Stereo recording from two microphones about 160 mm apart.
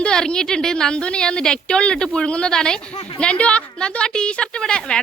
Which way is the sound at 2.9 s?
40° left (ahead or behind).